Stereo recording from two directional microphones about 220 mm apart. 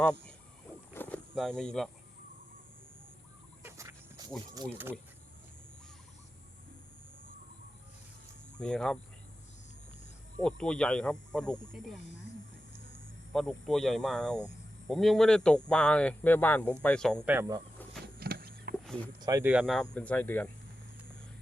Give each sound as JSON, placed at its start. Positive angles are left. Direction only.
{"t": 0.0, "sound": "speech", "side_deg": 5}
{"t": 0.9, "sound": "a sound", "side_deg": 10}
{"t": 3.6, "sound": "fowl", "side_deg": -10}
{"t": 4.5, "sound": "speech", "side_deg": -15}
{"t": 8.5, "sound": "speech", "side_deg": 5}
{"t": 10.4, "sound": "speech", "side_deg": 5}
{"t": 13.3, "sound": "a man's voice", "side_deg": 0}
{"t": 17.2, "sound": "speech", "side_deg": -10}
{"t": 18.2, "sound": "a sound", "side_deg": -45}
{"t": 19.2, "sound": "speech", "side_deg": -10}